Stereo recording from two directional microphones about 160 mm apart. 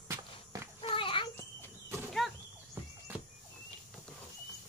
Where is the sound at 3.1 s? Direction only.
10° right (ahead or behind).